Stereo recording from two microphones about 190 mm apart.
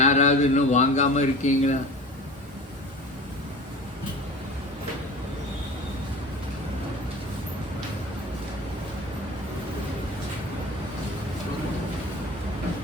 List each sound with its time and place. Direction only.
0.0 s speech: 35° left (ahead or behind)